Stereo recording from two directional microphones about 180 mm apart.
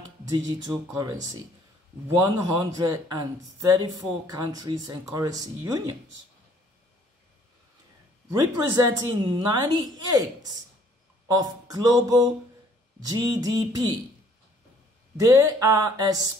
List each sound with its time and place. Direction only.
0.5 s speech: 20° right (ahead or behind)
2.1 s a woman's voice: 20° right (ahead or behind)
8.3 s a woman's voice: 15° right (ahead or behind)
15.1 s a woman's voice: 20° right (ahead or behind)